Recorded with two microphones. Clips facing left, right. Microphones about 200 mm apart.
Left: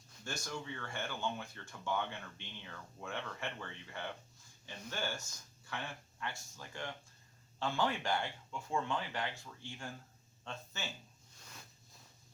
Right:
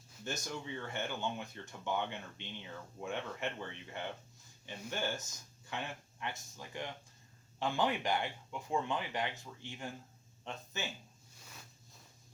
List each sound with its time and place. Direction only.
0.3 s speech: 20° right (ahead or behind)